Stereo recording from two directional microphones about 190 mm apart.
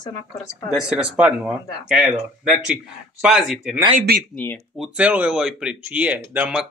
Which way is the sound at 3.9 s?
50° right (ahead or behind).